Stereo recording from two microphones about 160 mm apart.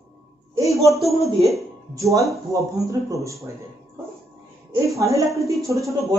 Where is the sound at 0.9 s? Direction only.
Centre (ahead or behind).